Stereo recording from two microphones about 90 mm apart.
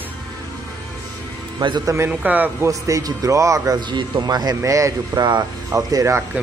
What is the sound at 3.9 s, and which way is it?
Speech, 55° right (ahead or behind).